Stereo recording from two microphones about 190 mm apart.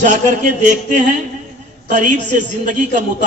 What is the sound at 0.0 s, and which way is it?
A woman's voice, 40° right (ahead or behind).